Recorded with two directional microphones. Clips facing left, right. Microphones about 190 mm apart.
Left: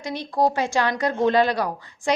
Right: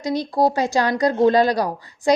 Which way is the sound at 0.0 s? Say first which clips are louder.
Right 3 dB; 40° right (ahead or behind).